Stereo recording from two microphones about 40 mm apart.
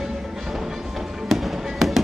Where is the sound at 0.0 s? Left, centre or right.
Centre.